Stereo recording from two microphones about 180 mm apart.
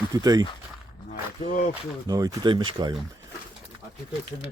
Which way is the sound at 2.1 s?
20° right (ahead or behind).